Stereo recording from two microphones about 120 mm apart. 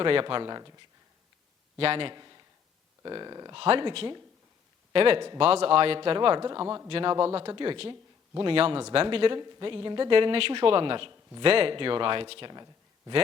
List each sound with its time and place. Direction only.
0.0 s speech: 45° right (ahead or behind)
1.8 s a man's voice: 50° right (ahead or behind); by 3.5 s 35° right (ahead or behind)
3.5 s speech: 50° right (ahead or behind); by 6.8 s 30° right (ahead or behind)
6.8 s speech: 45° right (ahead or behind)